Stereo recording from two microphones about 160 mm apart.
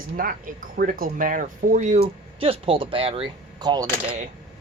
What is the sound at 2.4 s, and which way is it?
Speech, 35° right (ahead or behind).